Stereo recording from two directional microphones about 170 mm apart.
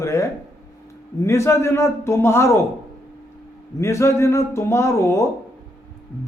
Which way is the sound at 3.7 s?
15° left (ahead or behind).